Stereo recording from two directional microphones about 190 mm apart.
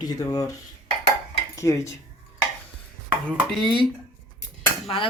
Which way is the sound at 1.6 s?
15° left (ahead or behind).